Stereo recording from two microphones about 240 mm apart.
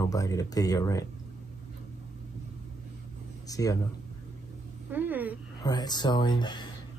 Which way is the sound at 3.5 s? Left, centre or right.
Centre.